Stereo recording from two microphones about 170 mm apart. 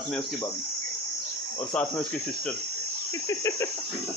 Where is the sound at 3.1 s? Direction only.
15° left (ahead or behind).